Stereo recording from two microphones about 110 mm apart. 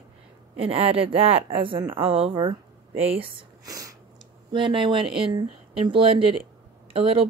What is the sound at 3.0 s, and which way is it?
Speech, 65° right (ahead or behind).